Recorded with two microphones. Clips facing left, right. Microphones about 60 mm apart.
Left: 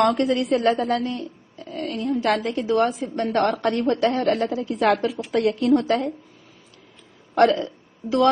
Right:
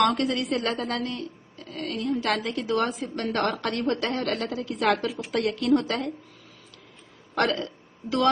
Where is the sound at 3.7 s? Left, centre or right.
Centre.